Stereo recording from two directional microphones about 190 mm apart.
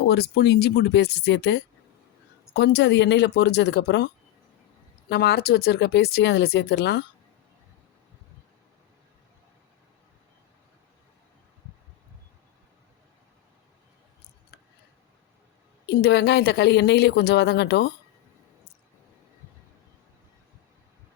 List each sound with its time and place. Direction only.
0.1 s speech: 55° left (ahead or behind)
15.9 s speech: 60° left (ahead or behind)